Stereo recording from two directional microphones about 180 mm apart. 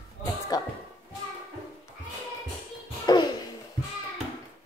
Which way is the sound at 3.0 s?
25° left (ahead or behind).